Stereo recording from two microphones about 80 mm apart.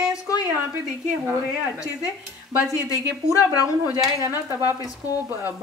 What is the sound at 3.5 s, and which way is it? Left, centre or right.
Speech, left.